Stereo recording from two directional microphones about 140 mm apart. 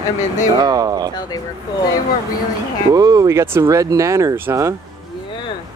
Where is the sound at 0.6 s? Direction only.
25° right (ahead or behind).